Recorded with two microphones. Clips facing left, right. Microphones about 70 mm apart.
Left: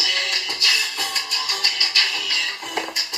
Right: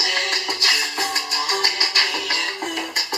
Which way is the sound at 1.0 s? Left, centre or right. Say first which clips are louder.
Right 4 dB; right.